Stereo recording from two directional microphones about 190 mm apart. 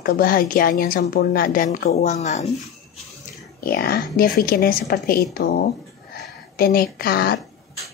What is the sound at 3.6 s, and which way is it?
Speech, 55° left (ahead or behind).